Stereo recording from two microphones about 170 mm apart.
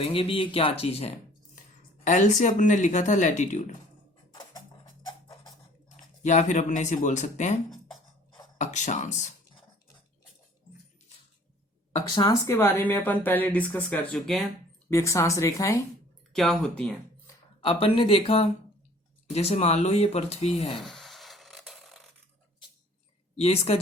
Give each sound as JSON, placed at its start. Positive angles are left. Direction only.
{"t": 0.0, "sound": "speech", "side_deg": 35}
{"t": 4.3, "sound": "music", "side_deg": 25}
{"t": 6.2, "sound": "speech", "side_deg": 45}
{"t": 11.9, "sound": "speech", "side_deg": 25}
{"t": 14.8, "sound": "speech", "side_deg": 15}
{"t": 16.3, "sound": "speech", "side_deg": 5}
{"t": 17.6, "sound": "speech", "side_deg": 30}
{"t": 20.8, "sound": "a sound", "side_deg": 0}
{"t": 23.4, "sound": "speech", "side_deg": 35}